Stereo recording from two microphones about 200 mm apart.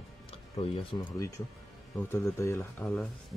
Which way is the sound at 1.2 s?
15° left (ahead or behind).